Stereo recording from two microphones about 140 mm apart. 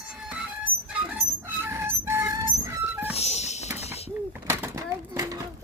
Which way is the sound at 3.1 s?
50° left (ahead or behind).